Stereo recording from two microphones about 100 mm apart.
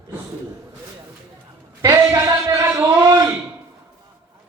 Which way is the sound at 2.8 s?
35° right (ahead or behind).